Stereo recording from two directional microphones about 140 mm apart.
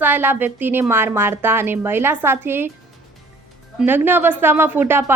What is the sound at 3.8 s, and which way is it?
A woman's voice, 15° right (ahead or behind).